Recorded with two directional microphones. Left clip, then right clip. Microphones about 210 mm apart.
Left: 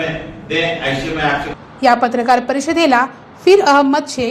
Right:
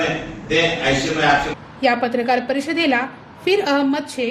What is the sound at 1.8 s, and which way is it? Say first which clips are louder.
A woman's voice: left 6 dB; 15° left (ahead or behind).